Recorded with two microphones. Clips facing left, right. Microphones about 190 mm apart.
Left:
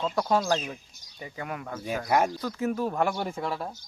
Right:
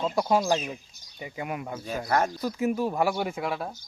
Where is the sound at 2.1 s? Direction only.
10° left (ahead or behind).